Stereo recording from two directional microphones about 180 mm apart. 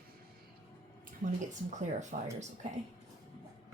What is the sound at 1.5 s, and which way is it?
Speech, 40° right (ahead or behind).